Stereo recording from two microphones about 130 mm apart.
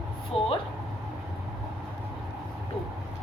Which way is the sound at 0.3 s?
Centre (ahead or behind).